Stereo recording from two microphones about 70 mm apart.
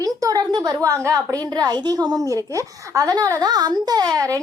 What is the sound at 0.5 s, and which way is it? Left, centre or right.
A woman's voice, right.